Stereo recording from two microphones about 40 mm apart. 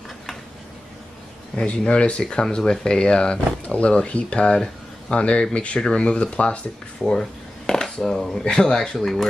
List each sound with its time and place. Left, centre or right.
1.7 s speech: left
7.1 s a sound: centre
8.0 s speech: centre
8.9 s speech: centre